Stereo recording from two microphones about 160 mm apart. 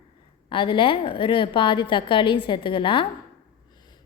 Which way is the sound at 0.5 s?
35° left (ahead or behind).